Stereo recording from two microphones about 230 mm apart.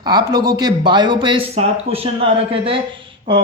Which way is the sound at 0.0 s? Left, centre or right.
Centre.